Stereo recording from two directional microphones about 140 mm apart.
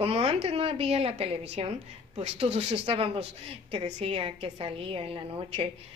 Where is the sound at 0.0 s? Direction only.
45° right (ahead or behind).